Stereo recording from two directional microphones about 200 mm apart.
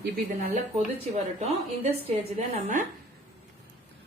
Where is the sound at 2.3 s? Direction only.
40° right (ahead or behind).